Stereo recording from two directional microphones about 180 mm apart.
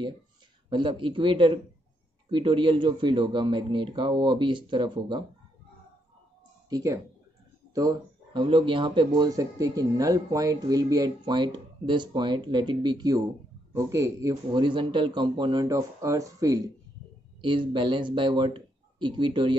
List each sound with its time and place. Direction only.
0.7 s speech: 25° right (ahead or behind)
6.7 s speech: 20° right (ahead or behind)